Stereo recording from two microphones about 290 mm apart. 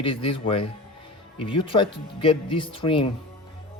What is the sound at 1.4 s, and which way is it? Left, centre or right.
Speech, centre.